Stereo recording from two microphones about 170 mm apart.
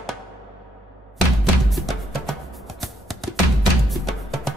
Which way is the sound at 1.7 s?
Centre (ahead or behind).